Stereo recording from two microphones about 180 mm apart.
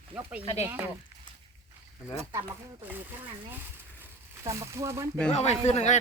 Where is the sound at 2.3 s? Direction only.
15° right (ahead or behind).